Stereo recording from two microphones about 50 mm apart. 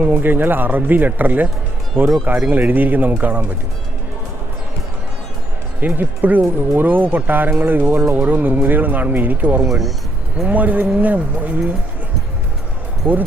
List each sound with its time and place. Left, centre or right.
0.0 s speech: right
5.8 s speech: right
9.6 s speech: centre
10.4 s speech: right
13.0 s speech: right